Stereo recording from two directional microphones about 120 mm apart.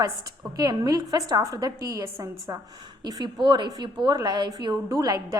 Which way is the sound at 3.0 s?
35° right (ahead or behind).